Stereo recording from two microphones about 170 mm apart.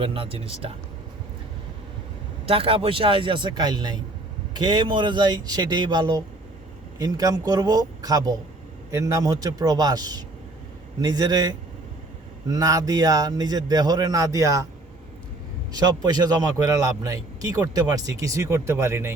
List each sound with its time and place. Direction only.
0.0 s a man's voice: 30° right (ahead or behind)
2.5 s a man's voice: 35° right (ahead or behind)
15.7 s a man's voice: 25° right (ahead or behind)